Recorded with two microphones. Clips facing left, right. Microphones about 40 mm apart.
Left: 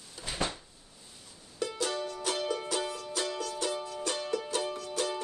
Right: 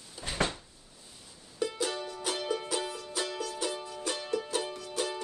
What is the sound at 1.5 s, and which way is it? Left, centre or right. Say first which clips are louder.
Music: even; centre.